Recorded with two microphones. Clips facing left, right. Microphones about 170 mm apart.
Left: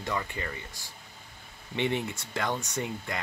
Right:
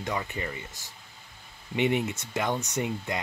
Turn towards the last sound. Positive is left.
turn(degrees=-20)  # may be behind; listen again after turning